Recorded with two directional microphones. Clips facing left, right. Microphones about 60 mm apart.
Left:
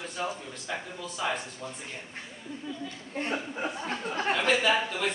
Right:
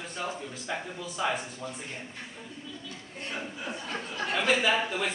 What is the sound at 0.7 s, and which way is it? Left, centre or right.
Speech, centre.